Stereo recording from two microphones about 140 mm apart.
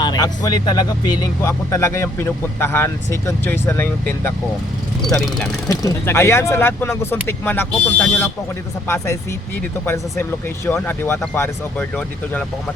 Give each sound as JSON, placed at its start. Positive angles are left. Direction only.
{"t": 0.0, "sound": "speech", "side_deg": 30}
{"t": 5.0, "sound": "speech", "side_deg": 0}
{"t": 5.8, "sound": "speech", "side_deg": 20}
{"t": 9.8, "sound": "speech", "side_deg": 15}